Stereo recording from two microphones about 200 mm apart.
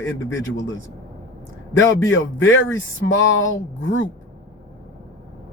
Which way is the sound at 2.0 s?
75° left (ahead or behind).